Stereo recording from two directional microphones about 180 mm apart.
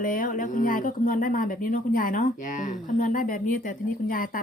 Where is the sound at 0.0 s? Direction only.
50° left (ahead or behind).